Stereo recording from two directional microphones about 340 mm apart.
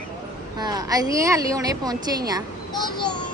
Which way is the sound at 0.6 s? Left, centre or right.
Centre.